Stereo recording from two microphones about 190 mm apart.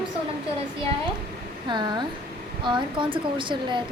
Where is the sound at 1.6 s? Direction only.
25° right (ahead or behind).